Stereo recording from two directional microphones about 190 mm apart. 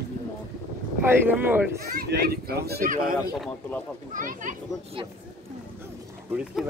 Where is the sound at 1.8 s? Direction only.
55° right (ahead or behind).